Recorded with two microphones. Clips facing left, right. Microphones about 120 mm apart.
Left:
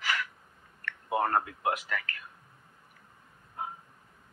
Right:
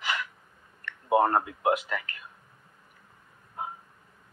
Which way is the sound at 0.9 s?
25° right (ahead or behind).